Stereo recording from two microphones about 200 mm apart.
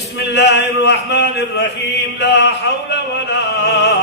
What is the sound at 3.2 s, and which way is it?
Opera, 60° left (ahead or behind).